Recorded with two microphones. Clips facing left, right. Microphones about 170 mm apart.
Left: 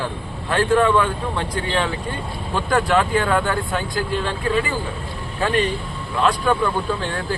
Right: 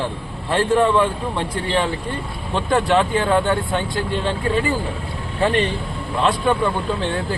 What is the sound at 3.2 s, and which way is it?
Speech, 25° right (ahead or behind).